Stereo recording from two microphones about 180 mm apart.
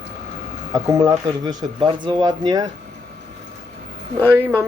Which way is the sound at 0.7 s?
20° right (ahead or behind).